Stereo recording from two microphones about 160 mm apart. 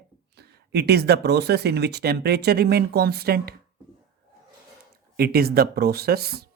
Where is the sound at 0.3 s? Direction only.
90° right.